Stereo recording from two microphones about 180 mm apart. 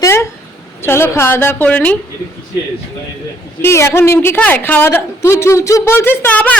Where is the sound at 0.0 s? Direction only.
15° left (ahead or behind).